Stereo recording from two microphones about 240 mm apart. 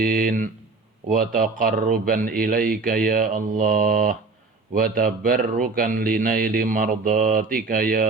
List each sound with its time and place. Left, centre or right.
0.0 s speech: right